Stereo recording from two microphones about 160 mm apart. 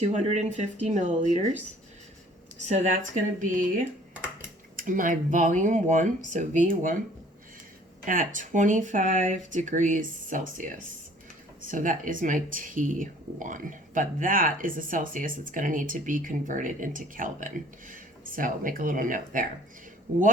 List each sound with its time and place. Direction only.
0.0 s speech: 45° right (ahead or behind)
2.6 s speech: 50° right (ahead or behind)
8.0 s speech: 60° right (ahead or behind)